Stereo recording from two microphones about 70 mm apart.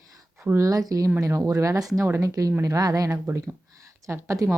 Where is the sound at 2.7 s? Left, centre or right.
Right.